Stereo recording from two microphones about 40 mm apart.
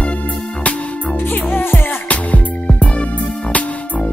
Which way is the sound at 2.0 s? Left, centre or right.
Left.